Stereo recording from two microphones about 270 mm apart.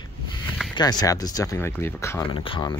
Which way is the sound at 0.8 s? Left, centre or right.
Centre.